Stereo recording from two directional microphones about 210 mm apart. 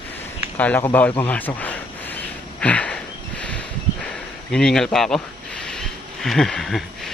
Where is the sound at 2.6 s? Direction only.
5° left (ahead or behind).